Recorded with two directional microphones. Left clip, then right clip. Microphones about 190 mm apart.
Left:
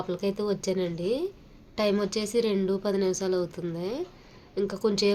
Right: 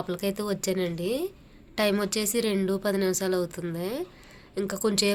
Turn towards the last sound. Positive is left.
turn(degrees=-5)  # may be behind; listen again after turning